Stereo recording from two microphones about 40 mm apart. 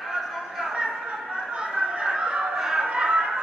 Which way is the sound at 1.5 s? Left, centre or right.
Right.